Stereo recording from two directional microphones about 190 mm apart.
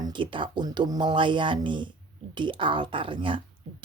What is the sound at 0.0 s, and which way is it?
Speech, 25° right (ahead or behind).